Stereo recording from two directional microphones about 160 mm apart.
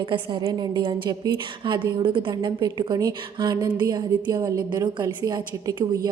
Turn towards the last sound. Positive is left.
turn(degrees=-25)  # may be behind; listen again after turning